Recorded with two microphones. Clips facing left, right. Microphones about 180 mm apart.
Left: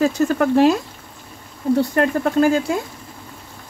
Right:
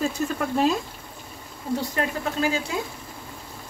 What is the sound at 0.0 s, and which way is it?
Speech, 75° left (ahead or behind).